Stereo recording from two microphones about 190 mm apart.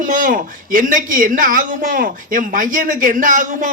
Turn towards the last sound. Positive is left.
turn(degrees=-45)  # may be behind; listen again after turning